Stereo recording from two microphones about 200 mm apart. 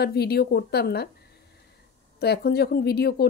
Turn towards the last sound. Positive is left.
turn(degrees=55)  # may be behind; listen again after turning